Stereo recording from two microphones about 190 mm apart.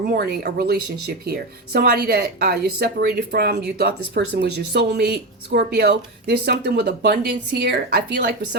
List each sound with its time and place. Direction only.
0.1 s speech: 55° right (ahead or behind)